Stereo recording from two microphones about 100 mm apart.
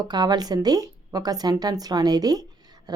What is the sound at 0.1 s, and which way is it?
A woman's voice, 45° right (ahead or behind).